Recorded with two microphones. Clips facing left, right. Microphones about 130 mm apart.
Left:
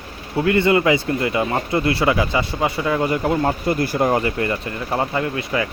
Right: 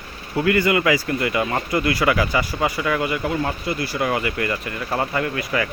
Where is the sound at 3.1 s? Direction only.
40° left (ahead or behind); by 5.6 s 25° left (ahead or behind).